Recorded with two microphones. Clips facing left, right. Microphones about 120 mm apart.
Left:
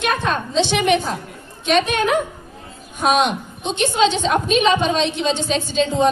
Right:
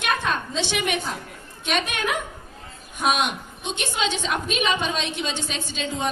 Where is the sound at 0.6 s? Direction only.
25° left (ahead or behind).